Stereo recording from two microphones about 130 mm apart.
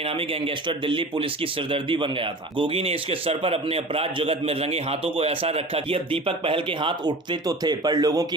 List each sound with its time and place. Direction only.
0.2 s a man's voice: 45° right (ahead or behind); by 8.3 s 25° right (ahead or behind)